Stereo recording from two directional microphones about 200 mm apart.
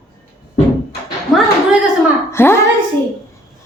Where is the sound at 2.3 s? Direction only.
10° left (ahead or behind).